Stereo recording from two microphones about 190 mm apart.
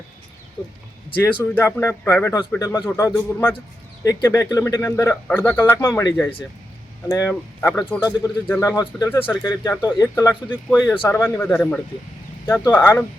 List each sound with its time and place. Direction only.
1.2 s speech: 10° left (ahead or behind)
8.7 s speech: 20° left (ahead or behind)
9.0 s speech: 10° left (ahead or behind)